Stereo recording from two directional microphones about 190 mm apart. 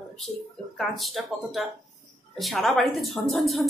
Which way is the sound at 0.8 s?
Centre (ahead or behind).